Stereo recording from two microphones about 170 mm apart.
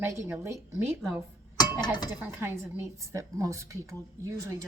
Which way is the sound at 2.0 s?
15° right (ahead or behind).